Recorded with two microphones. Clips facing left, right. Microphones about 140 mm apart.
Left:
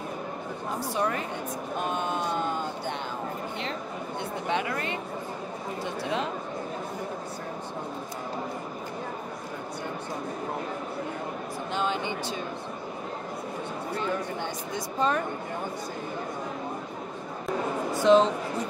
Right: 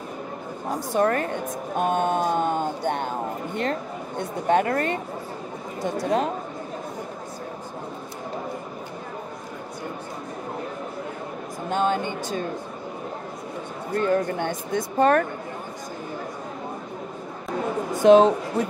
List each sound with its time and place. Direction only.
0.9 s a woman's voice: 55° right (ahead or behind)
4.2 s a woman's voice: 45° right (ahead or behind)
6.0 s a woman's voice: 45° right (ahead or behind)
11.7 s a woman's voice: 50° right (ahead or behind)
13.9 s speech: 60° right (ahead or behind)
17.9 s a woman's voice: 50° right (ahead or behind)